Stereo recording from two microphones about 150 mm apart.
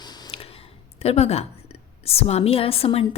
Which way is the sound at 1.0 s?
45° left (ahead or behind).